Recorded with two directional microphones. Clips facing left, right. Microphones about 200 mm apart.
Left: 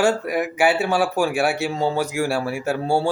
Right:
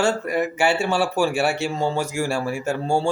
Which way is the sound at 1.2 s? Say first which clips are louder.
Right 3 dB; 15° left (ahead or behind).